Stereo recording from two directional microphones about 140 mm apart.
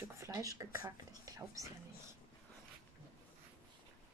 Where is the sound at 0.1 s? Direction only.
20° right (ahead or behind).